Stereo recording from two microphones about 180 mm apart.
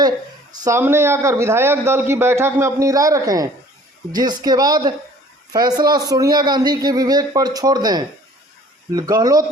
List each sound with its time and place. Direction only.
0.6 s a man's voice: 15° right (ahead or behind)